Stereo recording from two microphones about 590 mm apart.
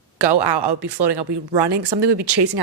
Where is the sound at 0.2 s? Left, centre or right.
Right.